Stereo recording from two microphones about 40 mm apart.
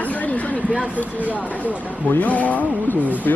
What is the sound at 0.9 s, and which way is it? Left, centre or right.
Speech, left.